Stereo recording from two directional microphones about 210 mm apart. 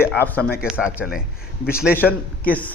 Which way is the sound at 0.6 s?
5° right (ahead or behind).